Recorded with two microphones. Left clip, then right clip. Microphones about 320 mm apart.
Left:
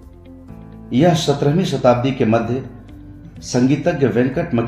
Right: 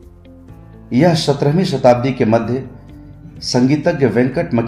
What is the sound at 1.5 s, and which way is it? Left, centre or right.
Speech, centre.